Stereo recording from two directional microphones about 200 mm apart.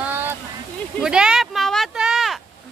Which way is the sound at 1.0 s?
5° right (ahead or behind).